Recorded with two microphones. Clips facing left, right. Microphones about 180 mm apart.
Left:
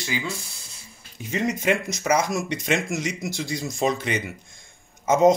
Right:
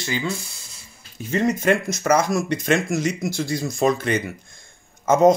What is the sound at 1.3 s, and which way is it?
Speech, 15° left (ahead or behind).